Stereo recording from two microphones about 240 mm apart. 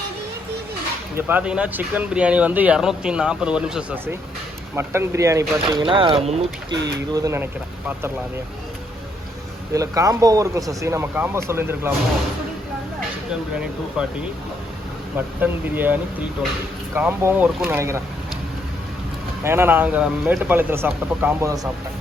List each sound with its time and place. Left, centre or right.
1.1 s speech: centre
9.7 s speech: centre
13.5 s speech: centre
15.4 s speech: centre
19.5 s speech: centre